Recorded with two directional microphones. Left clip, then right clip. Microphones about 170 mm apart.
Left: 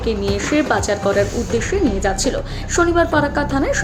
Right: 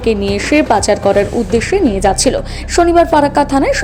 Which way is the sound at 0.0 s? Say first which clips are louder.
Right 6 dB; 40° right (ahead or behind).